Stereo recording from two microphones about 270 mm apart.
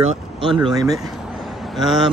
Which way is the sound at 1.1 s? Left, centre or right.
Centre.